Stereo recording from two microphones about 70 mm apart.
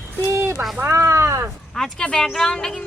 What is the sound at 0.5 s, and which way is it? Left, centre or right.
Speech, centre.